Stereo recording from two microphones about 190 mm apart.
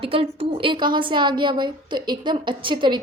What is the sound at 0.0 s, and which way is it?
A woman's voice, 30° right (ahead or behind).